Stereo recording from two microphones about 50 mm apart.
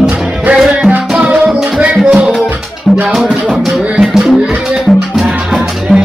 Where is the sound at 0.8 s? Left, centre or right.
Right.